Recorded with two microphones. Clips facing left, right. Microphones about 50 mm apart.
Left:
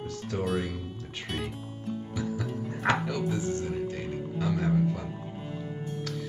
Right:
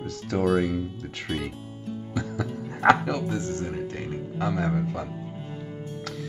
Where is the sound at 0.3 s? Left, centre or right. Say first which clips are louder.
Right 7 dB; right.